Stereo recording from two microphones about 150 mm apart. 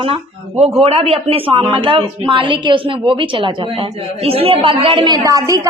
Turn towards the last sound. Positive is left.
turn(degrees=-20)  # may be behind; listen again after turning